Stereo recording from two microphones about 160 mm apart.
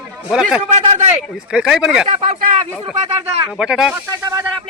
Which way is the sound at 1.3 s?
5° right (ahead or behind).